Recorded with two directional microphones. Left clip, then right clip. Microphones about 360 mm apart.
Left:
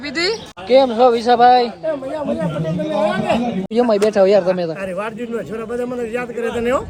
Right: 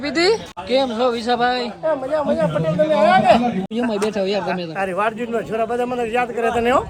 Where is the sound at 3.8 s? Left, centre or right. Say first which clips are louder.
Left 9 dB; centre.